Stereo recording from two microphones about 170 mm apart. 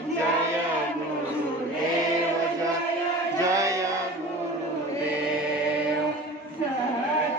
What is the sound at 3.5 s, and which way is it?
Chant, 20° right (ahead or behind).